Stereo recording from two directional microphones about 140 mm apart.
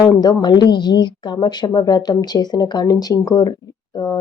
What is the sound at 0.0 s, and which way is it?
A woman's voice, 25° left (ahead or behind).